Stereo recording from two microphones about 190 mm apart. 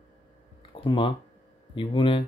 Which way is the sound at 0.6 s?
25° left (ahead or behind).